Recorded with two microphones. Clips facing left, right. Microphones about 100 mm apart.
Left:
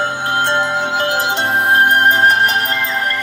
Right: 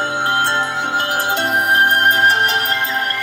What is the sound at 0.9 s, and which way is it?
Music, 20° left (ahead or behind).